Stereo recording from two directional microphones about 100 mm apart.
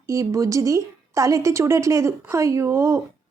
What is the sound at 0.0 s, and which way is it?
A woman's voice, 30° right (ahead or behind).